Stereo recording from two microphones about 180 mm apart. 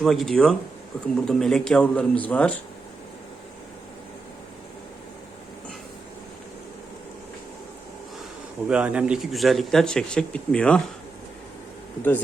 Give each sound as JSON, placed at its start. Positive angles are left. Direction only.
{"t": 0.0, "sound": "speech", "side_deg": 0}
{"t": 8.7, "sound": "speech", "side_deg": -5}